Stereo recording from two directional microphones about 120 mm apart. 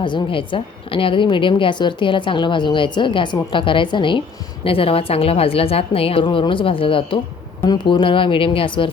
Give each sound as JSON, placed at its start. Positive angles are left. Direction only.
{"t": 0.0, "sound": "a woman's voice", "side_deg": 45}